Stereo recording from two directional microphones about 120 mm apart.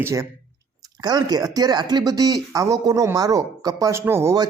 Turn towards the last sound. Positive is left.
turn(degrees=-25)  # may be behind; listen again after turning